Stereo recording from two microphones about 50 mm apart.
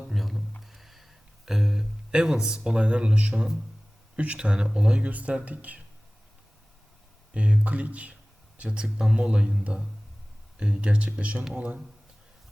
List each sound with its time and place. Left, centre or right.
0.0 s music: centre
0.6 s a sound: centre; by 3.5 s right
4.2 s speech: right
7.3 s speech: right